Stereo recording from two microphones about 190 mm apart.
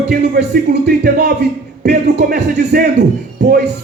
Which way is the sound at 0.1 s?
55° right (ahead or behind).